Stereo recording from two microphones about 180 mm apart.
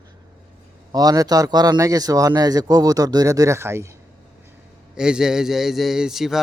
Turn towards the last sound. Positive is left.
turn(degrees=0)  # may be behind; listen again after turning